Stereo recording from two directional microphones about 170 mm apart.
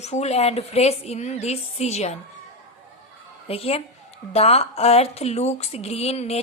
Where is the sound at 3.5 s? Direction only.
35° left (ahead or behind).